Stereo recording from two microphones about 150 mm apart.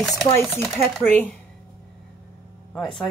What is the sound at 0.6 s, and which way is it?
Speech, centre (ahead or behind).